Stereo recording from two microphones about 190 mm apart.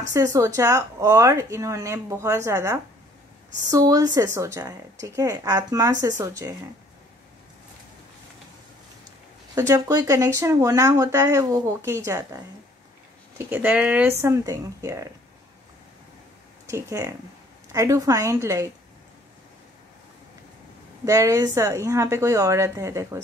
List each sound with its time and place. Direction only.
0.1 s speech: 15° right (ahead or behind)
9.6 s speech: 20° right (ahead or behind)
13.5 s speech: 10° right (ahead or behind)
16.6 s speech: 15° right (ahead or behind)
21.0 s speech: 15° right (ahead or behind)